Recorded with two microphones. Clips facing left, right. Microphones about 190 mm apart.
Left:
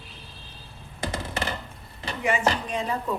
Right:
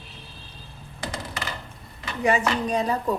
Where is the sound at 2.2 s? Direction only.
40° right (ahead or behind).